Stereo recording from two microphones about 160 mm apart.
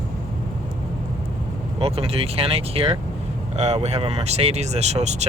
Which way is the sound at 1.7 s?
40° right (ahead or behind).